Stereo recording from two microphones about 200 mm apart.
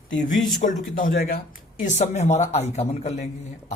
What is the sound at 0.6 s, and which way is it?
A man's voice, 40° left (ahead or behind).